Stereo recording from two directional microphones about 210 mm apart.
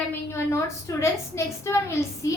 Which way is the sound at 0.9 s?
15° left (ahead or behind).